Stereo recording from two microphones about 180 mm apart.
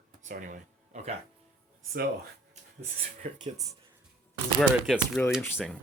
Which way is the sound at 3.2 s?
50° right (ahead or behind).